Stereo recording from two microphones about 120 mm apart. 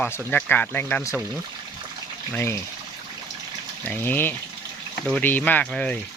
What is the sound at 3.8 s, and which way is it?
Speech, 15° left (ahead or behind).